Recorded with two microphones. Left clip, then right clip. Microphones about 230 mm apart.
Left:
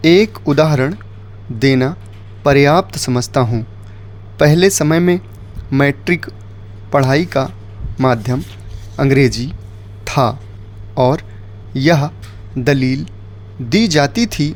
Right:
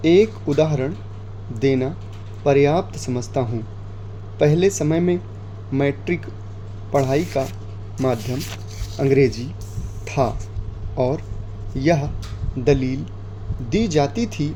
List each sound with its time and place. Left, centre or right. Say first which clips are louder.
0.0 s speech: left 4 dB; left
10.0 s music: left 6 dB; left
10.9 s speech: left 8 dB; left